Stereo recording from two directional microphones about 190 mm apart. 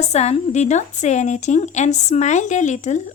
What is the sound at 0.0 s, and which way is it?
Speech, 35° left (ahead or behind).